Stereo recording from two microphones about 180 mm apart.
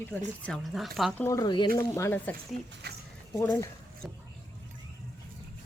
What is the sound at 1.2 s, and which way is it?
Speech, 20° left (ahead or behind).